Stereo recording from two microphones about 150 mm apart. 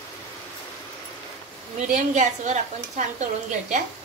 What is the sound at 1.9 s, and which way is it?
A woman's voice, 50° right (ahead or behind).